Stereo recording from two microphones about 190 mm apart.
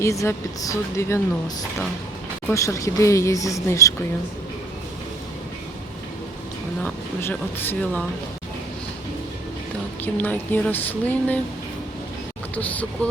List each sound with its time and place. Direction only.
0.0 s speech: 15° left (ahead or behind)
2.5 s speech: 15° left (ahead or behind)
6.8 s speech: 10° left (ahead or behind)
10.0 s speech: 10° left (ahead or behind)
12.5 s speech: 10° left (ahead or behind)